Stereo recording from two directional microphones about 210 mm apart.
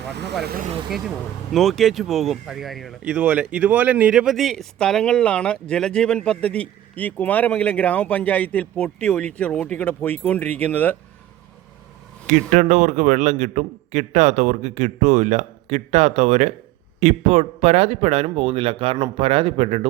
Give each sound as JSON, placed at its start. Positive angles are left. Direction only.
{"t": 0.4, "sound": "speech", "side_deg": -45}
{"t": 0.9, "sound": "speech", "side_deg": 0}
{"t": 12.3, "sound": "a man's voice", "side_deg": -35}